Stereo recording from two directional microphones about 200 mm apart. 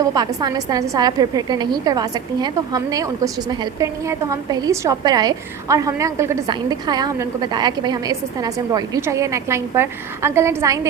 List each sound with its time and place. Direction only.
0.0 s a woman's voice: 20° right (ahead or behind)